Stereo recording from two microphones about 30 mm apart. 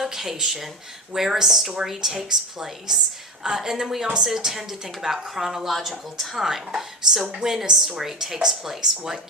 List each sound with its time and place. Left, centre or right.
0.0 s a woman's voice: centre
5.7 s a woman's voice: centre
7.3 s a woman's voice: centre